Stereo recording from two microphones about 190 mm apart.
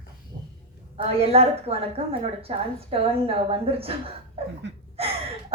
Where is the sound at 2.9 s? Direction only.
30° right (ahead or behind).